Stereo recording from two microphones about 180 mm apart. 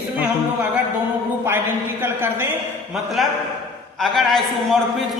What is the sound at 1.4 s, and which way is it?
Music, 15° right (ahead or behind).